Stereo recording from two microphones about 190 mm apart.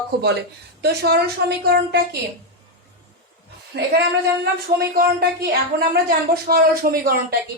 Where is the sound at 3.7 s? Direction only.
60° right (ahead or behind).